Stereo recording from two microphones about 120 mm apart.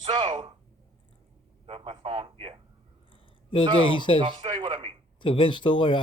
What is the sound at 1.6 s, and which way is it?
Speech, 45° right (ahead or behind).